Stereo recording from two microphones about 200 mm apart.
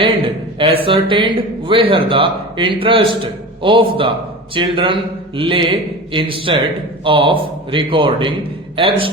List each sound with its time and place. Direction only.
0.0 s a man's voice: 25° right (ahead or behind)